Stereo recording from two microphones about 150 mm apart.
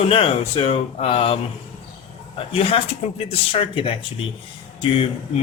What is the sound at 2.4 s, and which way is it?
Speech, 40° left (ahead or behind).